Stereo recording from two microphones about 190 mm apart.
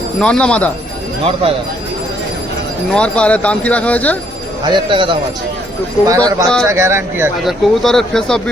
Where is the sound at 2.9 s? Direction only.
5° left (ahead or behind).